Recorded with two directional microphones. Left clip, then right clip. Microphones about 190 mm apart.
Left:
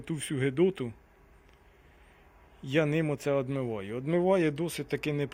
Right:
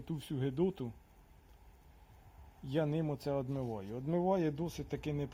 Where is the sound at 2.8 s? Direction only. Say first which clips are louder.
Left 7 dB; 10° left (ahead or behind).